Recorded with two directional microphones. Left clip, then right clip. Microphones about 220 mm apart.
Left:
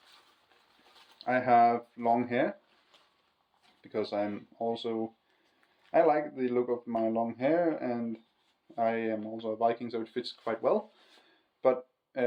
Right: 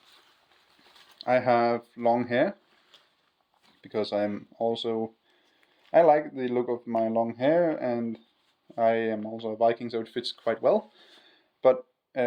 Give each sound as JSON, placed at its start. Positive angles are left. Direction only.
{"t": 1.2, "sound": "speech", "side_deg": -50}
{"t": 3.8, "sound": "speech", "side_deg": -50}
{"t": 11.3, "sound": "a sound", "side_deg": -50}